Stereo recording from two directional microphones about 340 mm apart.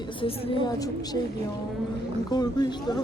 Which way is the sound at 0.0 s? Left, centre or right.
Centre.